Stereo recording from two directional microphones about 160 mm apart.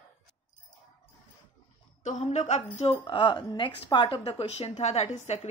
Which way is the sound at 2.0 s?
45° left (ahead or behind).